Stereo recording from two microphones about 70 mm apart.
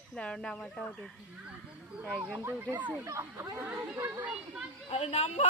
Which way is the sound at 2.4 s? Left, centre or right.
Right.